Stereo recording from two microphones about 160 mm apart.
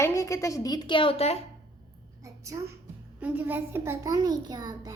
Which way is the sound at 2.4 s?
20° right (ahead or behind).